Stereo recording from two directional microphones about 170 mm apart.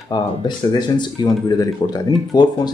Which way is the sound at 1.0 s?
20° left (ahead or behind).